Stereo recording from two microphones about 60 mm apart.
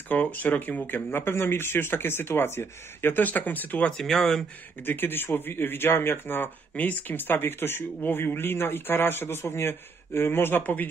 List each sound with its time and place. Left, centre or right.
0.1 s speech: left
3.9 s speech: centre
4.8 s speech: left